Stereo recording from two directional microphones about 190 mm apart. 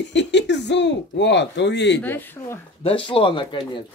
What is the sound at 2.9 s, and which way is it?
Speech, 30° left (ahead or behind).